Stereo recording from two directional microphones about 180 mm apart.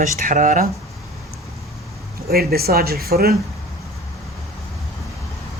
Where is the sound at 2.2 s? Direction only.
60° right (ahead or behind).